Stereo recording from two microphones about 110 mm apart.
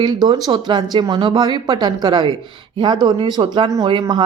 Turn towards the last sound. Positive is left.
turn(degrees=-45)  # may be behind; listen again after turning